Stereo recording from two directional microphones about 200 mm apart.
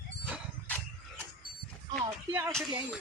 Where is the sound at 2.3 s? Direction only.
15° right (ahead or behind).